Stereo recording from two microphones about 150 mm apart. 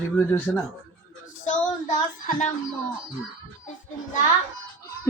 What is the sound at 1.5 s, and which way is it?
Speech, 60° left (ahead or behind).